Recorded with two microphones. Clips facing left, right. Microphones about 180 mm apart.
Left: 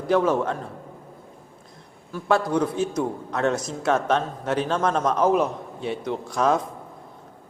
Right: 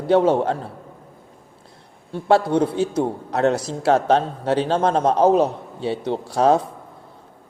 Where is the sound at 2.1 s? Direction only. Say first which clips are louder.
Right 5 dB; 30° right (ahead or behind).